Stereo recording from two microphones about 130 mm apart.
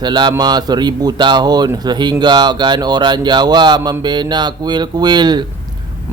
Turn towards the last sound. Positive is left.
turn(degrees=-35)  # may be behind; listen again after turning